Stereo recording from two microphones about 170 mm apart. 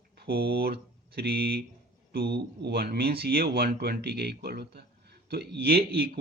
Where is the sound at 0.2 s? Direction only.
65° right (ahead or behind).